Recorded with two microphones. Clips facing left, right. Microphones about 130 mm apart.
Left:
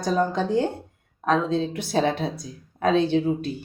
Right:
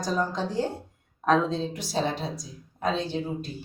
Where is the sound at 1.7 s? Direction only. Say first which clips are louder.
Left 5 dB; 60° left (ahead or behind).